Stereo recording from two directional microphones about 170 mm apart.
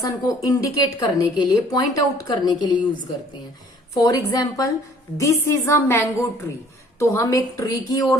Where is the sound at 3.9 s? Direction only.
20° left (ahead or behind).